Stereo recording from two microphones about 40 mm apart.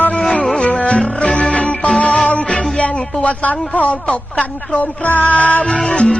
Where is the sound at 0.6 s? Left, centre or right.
Left.